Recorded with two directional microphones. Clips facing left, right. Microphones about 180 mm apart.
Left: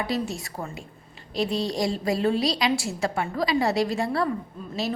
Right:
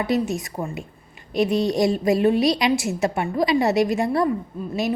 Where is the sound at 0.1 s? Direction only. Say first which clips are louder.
Right 6 dB; 20° right (ahead or behind).